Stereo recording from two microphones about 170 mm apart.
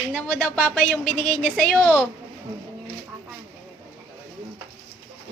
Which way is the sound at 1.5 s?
5° left (ahead or behind).